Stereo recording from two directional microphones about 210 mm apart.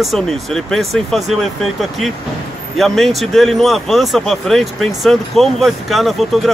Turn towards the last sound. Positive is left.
turn(degrees=0)  # may be behind; listen again after turning